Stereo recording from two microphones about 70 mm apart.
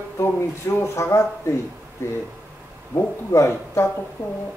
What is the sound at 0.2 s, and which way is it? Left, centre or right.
Speech, left.